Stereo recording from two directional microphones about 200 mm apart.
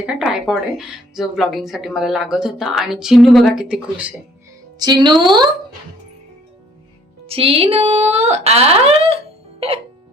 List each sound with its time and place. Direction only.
0.0 s speech: 5° right (ahead or behind)
4.8 s speech: 20° right (ahead or behind)
7.3 s speech: 30° right (ahead or behind)